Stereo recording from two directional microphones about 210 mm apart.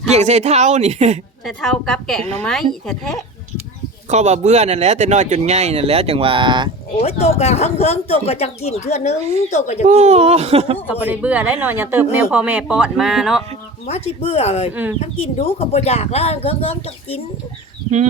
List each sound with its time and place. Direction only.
0.1 s speech: 30° right (ahead or behind)
1.5 s a woman's voice: centre (ahead or behind)
4.1 s speech: 35° right (ahead or behind)
7.0 s speech: 30° left (ahead or behind)
9.8 s speech: 30° right (ahead or behind)
10.8 s speech: 5° right (ahead or behind)
13.8 s speech: 30° left (ahead or behind)
14.7 s speech: 10° right (ahead or behind)
15.0 s speech: 30° left (ahead or behind)